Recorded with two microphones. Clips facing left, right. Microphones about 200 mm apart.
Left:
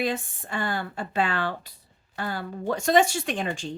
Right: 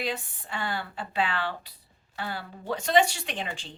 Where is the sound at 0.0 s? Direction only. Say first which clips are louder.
Left 5 dB; 45° left (ahead or behind).